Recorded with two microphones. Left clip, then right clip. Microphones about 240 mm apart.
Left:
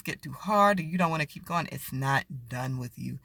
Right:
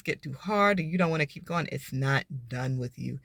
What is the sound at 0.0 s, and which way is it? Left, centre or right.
Speech, centre.